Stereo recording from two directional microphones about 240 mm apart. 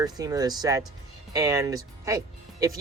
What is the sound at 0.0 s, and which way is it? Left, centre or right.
Speech, centre.